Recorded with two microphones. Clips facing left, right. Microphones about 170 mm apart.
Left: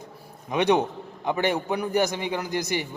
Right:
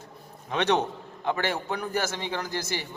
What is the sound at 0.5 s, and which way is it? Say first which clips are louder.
A man's voice: left 3 dB; 15° left (ahead or behind).